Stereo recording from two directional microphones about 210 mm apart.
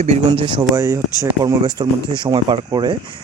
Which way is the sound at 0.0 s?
30° right (ahead or behind).